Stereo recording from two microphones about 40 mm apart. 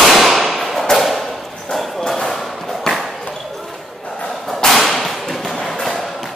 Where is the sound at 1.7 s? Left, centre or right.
Centre.